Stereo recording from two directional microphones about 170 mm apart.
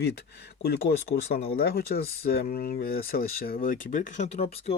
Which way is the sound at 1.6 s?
65° left (ahead or behind).